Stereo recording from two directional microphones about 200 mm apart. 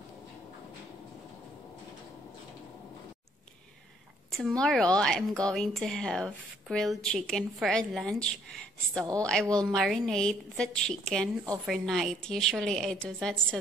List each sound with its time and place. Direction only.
4.3 s a woman's voice: centre (ahead or behind)